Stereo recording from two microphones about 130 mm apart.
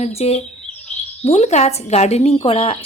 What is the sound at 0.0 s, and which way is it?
Speech, 50° left (ahead or behind).